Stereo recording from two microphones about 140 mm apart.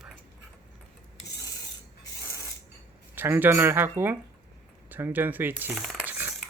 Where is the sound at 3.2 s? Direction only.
15° right (ahead or behind).